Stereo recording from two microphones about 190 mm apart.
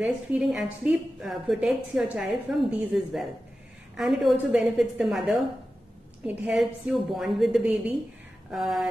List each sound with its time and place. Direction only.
0.0 s a woman's voice: 5° right (ahead or behind)